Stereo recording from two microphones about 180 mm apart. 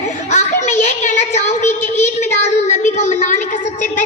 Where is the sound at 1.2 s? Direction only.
40° left (ahead or behind).